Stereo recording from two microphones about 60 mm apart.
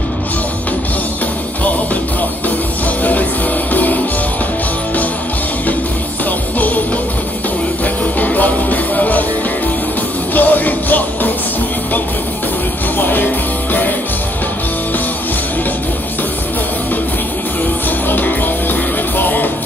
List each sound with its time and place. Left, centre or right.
3.0 s music: left
7.8 s music: left
10.3 s music: left
12.9 s music: left
17.8 s music: left